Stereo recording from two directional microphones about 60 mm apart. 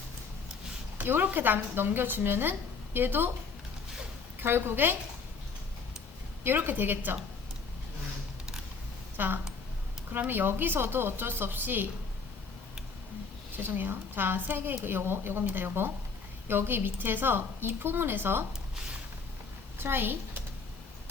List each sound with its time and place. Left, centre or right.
0.9 s a woman's voice: right
4.4 s a woman's voice: right
6.4 s a woman's voice: right
9.1 s a woman's voice: right
13.6 s a woman's voice: right
19.8 s a woman's voice: right